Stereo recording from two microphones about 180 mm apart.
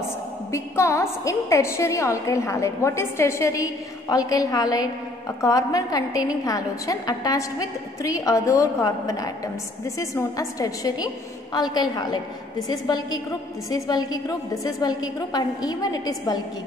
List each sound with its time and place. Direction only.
0.5 s a woman's voice: 15° left (ahead or behind)